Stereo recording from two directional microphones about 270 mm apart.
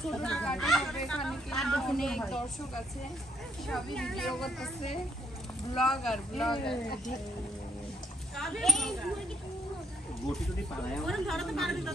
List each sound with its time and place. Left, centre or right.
0.1 s speech: centre
3.6 s speech: centre
5.9 s speech: centre
6.5 s speech: centre
8.4 s speech: centre
11.1 s speech: centre